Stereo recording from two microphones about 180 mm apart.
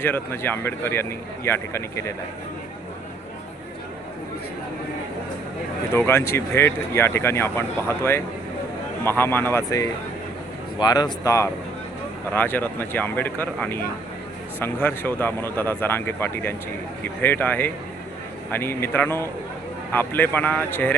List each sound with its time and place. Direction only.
0.0 s speech: 10° left (ahead or behind)
5.9 s speech: 15° left (ahead or behind)